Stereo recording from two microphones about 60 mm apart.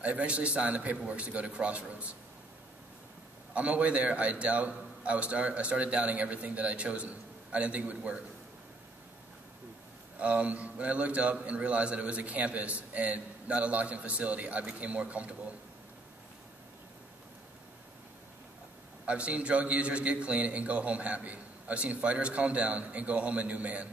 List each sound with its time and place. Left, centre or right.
0.0 s a man's voice: right
3.5 s a man's voice: right
10.1 s a man's voice: right
19.0 s a man's voice: right